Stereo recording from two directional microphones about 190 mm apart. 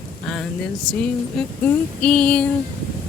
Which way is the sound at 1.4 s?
Centre (ahead or behind).